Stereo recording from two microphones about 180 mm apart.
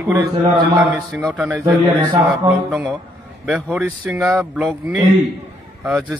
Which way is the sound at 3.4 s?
5° right (ahead or behind).